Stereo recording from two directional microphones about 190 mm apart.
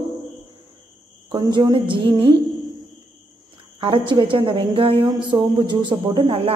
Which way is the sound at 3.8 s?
25° right (ahead or behind).